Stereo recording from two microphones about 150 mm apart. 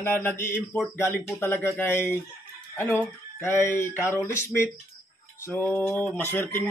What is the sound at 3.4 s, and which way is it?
Music, 15° left (ahead or behind).